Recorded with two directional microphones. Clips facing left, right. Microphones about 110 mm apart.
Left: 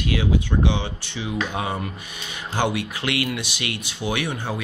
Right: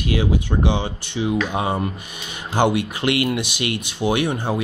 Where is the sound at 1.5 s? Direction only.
25° right (ahead or behind).